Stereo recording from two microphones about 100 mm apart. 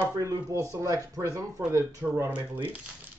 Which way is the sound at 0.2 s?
35° right (ahead or behind).